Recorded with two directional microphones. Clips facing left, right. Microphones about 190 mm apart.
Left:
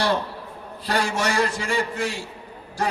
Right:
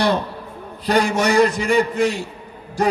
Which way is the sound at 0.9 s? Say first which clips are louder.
Right 6 dB; 20° right (ahead or behind).